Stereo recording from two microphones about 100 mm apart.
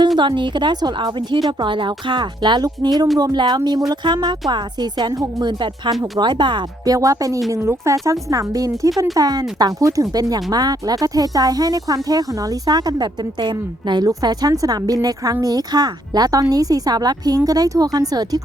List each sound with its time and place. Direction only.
0.2 s a woman's voice: 50° right (ahead or behind)
6.9 s a woman's voice: 35° right (ahead or behind)
14.1 s a woman's voice: 40° right (ahead or behind)